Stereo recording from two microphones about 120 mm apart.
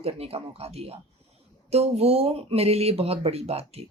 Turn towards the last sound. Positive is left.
turn(degrees=-60)  # may be behind; listen again after turning